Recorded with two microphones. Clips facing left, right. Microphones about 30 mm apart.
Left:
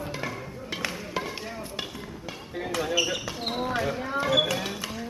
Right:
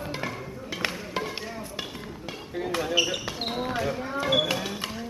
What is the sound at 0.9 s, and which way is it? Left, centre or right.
Music, centre.